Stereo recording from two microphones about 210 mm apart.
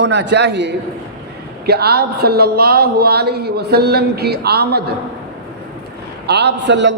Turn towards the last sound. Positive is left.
turn(degrees=-60)  # may be behind; listen again after turning